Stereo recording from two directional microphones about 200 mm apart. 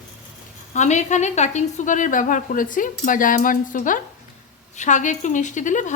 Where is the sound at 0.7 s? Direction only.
35° left (ahead or behind).